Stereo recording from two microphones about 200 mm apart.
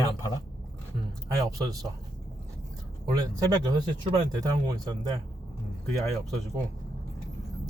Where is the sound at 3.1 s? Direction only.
20° right (ahead or behind).